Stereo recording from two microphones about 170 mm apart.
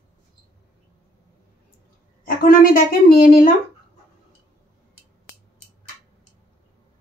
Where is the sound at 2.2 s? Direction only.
55° left (ahead or behind).